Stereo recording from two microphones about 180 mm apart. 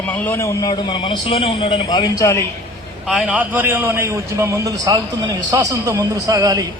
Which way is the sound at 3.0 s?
Centre (ahead or behind).